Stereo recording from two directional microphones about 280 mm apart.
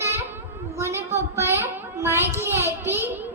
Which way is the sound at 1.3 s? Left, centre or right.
Centre.